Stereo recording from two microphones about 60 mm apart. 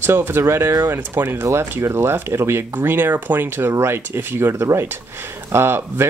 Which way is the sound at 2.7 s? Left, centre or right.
Right.